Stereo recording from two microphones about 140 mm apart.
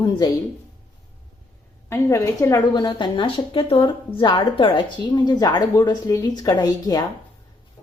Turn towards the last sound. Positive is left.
turn(degrees=25)  # may be behind; listen again after turning